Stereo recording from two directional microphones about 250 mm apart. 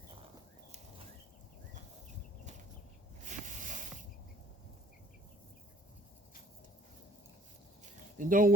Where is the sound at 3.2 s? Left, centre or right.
Right.